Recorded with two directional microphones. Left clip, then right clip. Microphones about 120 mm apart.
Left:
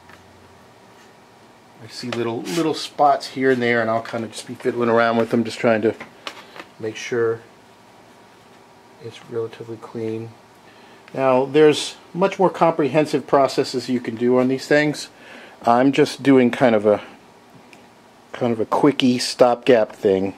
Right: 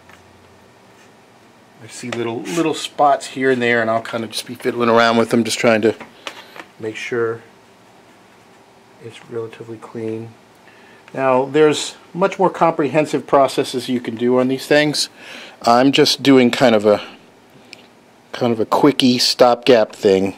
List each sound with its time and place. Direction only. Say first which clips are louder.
2.0 s speech: right 1 dB; 5° right (ahead or behind)
2.7 s speech: right 2 dB; 20° right (ahead or behind)
4.2 s speech: right 3 dB; 30° right (ahead or behind)
5.0 s speech: right 4 dB; 50° right (ahead or behind)
6.8 s speech: right 1 dB; 20° right (ahead or behind)
9.1 s speech: even; 10° right (ahead or behind); by 15.0 s 25° right (ahead or behind)
15.2 s speech: right 1 dB; 45° right (ahead or behind)
18.3 s speech: right 3 dB; 45° right (ahead or behind)
18.7 s speech: right 3 dB; 55° right (ahead or behind)